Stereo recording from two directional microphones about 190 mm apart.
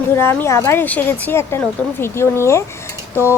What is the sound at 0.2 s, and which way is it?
A woman's voice, 15° left (ahead or behind).